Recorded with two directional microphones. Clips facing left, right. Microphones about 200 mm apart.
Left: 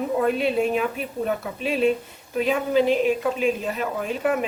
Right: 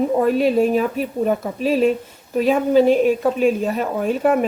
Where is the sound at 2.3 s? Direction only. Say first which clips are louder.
Right 6 dB; 45° right (ahead or behind).